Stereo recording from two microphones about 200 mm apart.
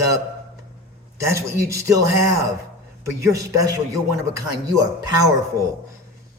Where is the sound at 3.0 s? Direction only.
15° right (ahead or behind).